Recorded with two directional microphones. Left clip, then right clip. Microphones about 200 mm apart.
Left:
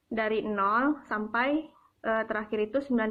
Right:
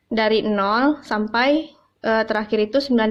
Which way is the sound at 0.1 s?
55° right (ahead or behind).